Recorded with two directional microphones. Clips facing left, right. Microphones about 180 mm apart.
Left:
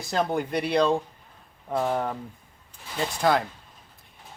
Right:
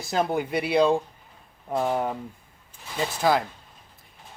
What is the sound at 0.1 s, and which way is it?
Speech, 5° right (ahead or behind).